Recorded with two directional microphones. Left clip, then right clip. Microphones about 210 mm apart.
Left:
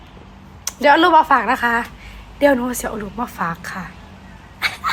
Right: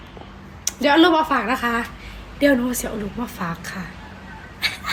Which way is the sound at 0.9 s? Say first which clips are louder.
Left 2 dB; 20° left (ahead or behind).